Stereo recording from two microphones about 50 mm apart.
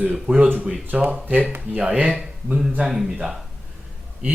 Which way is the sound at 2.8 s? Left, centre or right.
Centre.